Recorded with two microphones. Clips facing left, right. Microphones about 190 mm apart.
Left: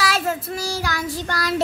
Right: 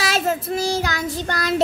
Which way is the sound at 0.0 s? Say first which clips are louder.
Right 1 dB; 20° right (ahead or behind).